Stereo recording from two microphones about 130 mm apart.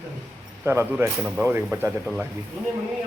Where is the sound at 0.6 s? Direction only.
15° right (ahead or behind).